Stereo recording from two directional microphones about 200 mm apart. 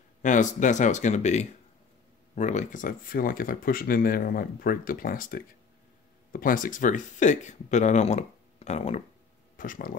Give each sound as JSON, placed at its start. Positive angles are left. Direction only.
{"t": 0.2, "sound": "speech", "side_deg": 40}